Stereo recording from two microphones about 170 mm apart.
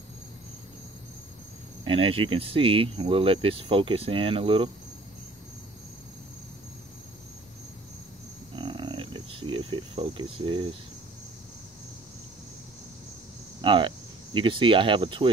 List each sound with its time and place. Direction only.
1.9 s speech: 35° right (ahead or behind)
8.5 s cricket: 30° right (ahead or behind)
13.6 s speech: 30° right (ahead or behind)